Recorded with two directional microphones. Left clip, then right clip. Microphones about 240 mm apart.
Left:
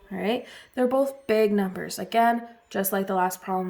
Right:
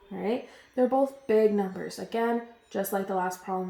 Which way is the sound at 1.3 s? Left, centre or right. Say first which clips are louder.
Even; left.